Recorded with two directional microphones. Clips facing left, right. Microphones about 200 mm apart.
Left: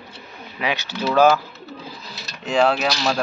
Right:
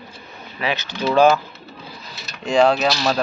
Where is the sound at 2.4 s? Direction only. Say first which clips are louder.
Right 3 dB; 5° left (ahead or behind).